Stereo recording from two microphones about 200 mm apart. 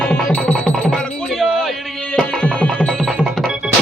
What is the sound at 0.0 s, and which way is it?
Music, 5° left (ahead or behind).